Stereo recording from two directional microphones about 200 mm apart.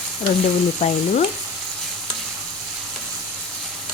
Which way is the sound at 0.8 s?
35° left (ahead or behind).